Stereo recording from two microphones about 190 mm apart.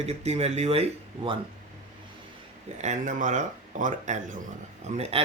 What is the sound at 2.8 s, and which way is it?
Speech, 40° right (ahead or behind).